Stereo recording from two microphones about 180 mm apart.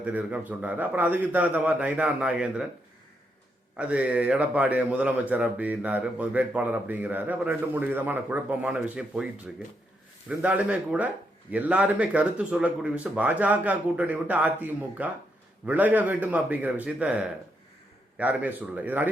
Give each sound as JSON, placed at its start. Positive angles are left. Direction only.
{"t": 0.0, "sound": "speech", "side_deg": -10}
{"t": 3.8, "sound": "speech", "side_deg": -5}